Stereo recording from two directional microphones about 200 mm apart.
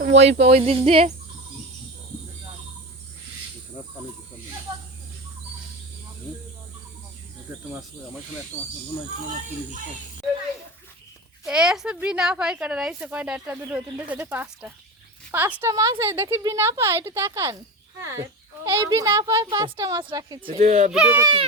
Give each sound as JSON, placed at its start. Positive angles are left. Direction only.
{"t": 0.0, "sound": "a sound", "side_deg": -60}
{"t": 0.5, "sound": "insect", "side_deg": -30}
{"t": 11.4, "sound": "speech", "side_deg": -5}
{"t": 20.7, "sound": "speech", "side_deg": -40}
{"t": 20.9, "sound": "speech", "side_deg": -5}
{"t": 21.2, "sound": "insect", "side_deg": -20}